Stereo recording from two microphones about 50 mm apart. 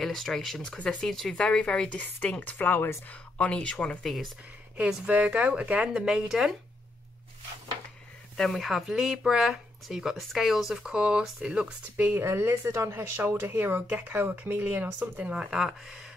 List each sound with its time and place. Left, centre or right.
0.0 s speech: centre
1.3 s speech: centre
2.0 s speech: left
3.1 s speech: left
4.0 s speech: centre
5.0 s speech: right
8.4 s speech: centre
12.0 s speech: right
15.2 s speech: right
15.6 s speech: centre